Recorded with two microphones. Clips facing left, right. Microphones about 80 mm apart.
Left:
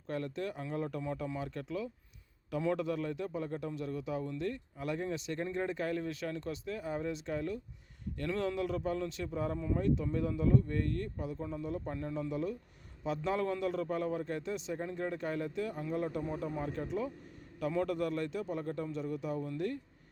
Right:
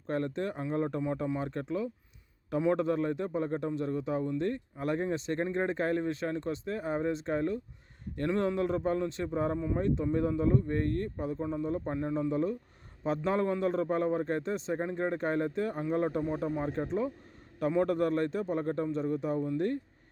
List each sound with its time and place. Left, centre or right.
0.1 s speech: right